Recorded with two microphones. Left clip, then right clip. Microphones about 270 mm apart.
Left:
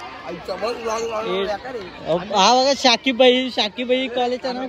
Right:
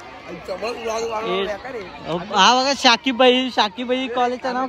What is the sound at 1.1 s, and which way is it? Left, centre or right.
Speech, centre.